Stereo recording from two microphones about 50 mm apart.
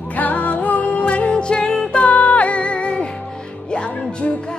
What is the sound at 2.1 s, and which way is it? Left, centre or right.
Music, left.